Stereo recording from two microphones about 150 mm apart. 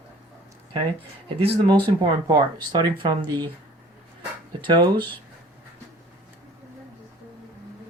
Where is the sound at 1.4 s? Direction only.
40° right (ahead or behind).